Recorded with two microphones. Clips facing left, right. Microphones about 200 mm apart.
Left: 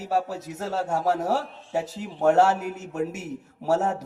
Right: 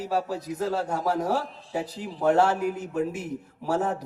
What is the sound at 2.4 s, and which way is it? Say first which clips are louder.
Speech: left 2 dB; 45° left (ahead or behind).